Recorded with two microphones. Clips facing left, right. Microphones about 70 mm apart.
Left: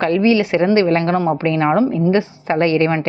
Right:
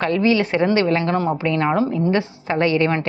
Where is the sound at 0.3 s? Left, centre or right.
Right.